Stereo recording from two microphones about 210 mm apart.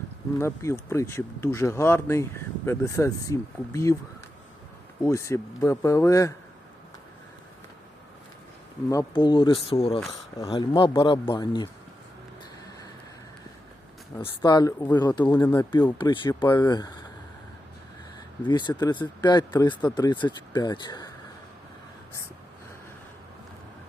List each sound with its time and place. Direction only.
0.3 s speech: 15° left (ahead or behind)
5.0 s speech: 15° left (ahead or behind)
8.9 s a man's voice: 20° left (ahead or behind)
14.4 s a man's voice: 20° left (ahead or behind)
18.4 s a man's voice: 20° left (ahead or behind)